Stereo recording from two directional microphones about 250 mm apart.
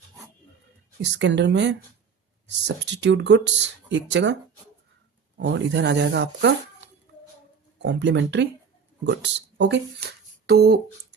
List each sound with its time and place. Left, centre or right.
1.0 s speech: right
2.9 s speech: right
5.4 s speech: right